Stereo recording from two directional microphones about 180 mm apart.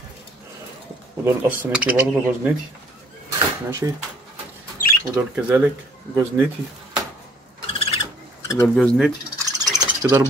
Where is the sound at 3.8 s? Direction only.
15° right (ahead or behind).